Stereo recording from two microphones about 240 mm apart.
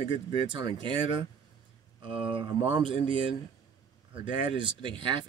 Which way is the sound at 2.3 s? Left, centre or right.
Centre.